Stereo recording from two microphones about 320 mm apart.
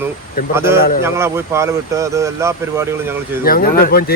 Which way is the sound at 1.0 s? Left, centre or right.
Centre.